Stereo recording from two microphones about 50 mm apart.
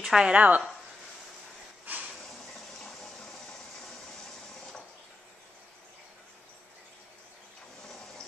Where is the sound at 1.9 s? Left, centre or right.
Right.